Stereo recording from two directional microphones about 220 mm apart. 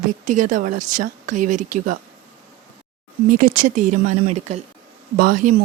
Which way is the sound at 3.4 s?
40° right (ahead or behind).